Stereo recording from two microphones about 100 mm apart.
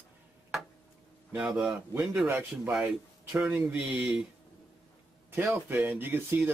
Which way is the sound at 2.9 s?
10° right (ahead or behind).